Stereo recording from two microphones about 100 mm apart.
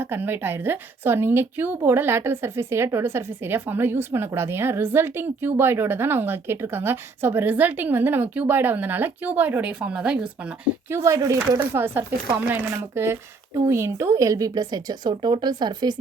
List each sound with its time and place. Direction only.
0.0 s a woman's voice: 20° right (ahead or behind)
10.8 s speech: 25° right (ahead or behind); by 16.0 s 45° right (ahead or behind)